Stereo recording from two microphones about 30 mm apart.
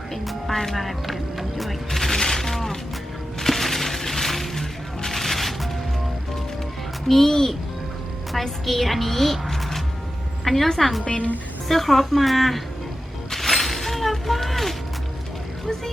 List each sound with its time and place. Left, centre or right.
0.1 s music: centre
0.5 s a woman's voice: centre
0.8 s music: centre
1.9 s fusillade: centre
3.4 s music: centre
7.1 s a woman's voice: centre
8.3 s a woman's voice: centre
13.3 s a sound: centre
15.6 s speech: centre